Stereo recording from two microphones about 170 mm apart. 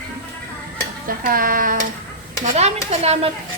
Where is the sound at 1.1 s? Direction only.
55° right (ahead or behind).